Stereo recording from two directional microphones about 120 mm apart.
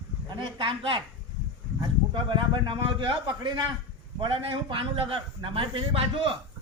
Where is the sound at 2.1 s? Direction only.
40° right (ahead or behind).